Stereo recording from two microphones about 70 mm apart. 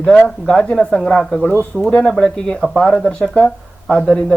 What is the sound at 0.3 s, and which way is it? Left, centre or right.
Speech, centre.